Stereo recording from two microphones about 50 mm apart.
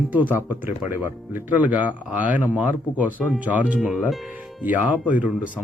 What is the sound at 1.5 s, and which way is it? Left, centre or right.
Speech, right.